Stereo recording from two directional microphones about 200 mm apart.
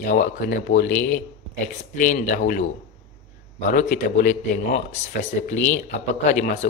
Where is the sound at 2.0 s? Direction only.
40° left (ahead or behind).